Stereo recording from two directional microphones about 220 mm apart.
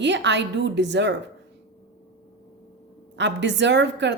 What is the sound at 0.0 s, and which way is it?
A woman's voice, 55° right (ahead or behind).